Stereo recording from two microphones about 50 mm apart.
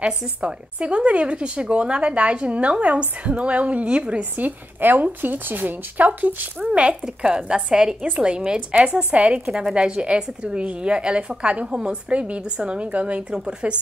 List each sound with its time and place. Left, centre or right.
0.0 s a woman's voice: centre; by 6.5 s right
6.6 s a woman's voice: right